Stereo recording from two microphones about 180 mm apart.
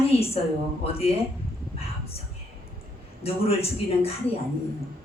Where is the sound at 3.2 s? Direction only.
35° left (ahead or behind).